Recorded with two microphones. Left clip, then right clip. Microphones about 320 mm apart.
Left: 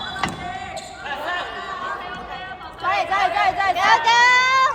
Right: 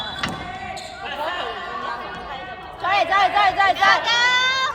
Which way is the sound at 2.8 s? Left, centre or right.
Right.